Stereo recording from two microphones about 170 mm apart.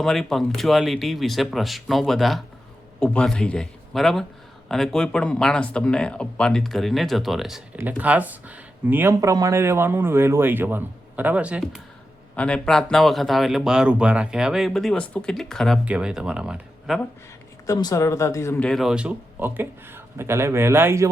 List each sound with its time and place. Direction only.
0.0 s speech: centre (ahead or behind)
12.4 s speech: 5° left (ahead or behind)
17.7 s speech: 20° left (ahead or behind)
18.7 s speech: centre (ahead or behind)